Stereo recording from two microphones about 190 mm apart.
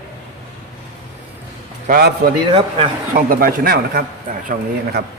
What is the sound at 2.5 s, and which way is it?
Speech, 25° right (ahead or behind).